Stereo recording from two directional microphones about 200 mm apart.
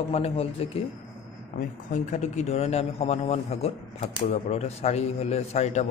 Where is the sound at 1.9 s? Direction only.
40° left (ahead or behind).